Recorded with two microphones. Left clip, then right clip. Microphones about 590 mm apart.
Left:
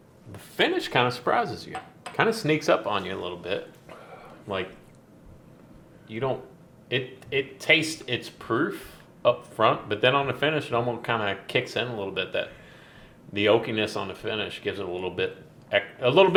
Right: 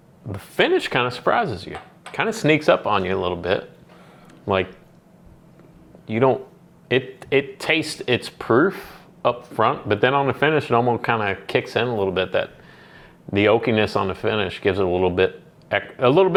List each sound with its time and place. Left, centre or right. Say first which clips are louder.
0.3 s speech: right 6 dB; right
6.1 s speech: right 11 dB; right